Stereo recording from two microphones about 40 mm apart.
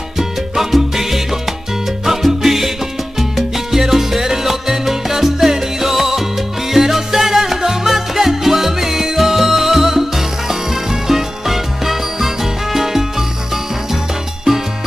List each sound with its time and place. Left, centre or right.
0.2 s salsa music: centre